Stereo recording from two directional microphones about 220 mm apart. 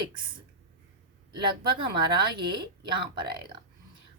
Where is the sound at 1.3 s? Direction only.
20° right (ahead or behind).